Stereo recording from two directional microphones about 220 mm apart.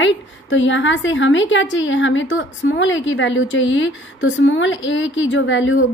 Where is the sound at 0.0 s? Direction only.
60° left (ahead or behind).